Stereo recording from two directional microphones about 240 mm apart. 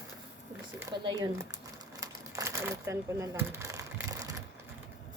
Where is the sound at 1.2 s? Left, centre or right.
Centre.